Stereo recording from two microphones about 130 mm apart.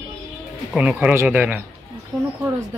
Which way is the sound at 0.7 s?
10° right (ahead or behind).